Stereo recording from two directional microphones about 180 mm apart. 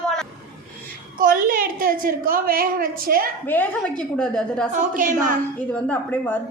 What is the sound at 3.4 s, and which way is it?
A woman's voice, 10° left (ahead or behind).